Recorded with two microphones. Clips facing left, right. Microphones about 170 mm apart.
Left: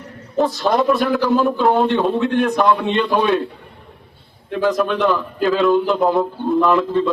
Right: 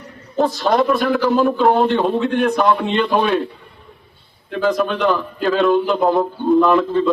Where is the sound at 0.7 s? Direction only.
Centre (ahead or behind).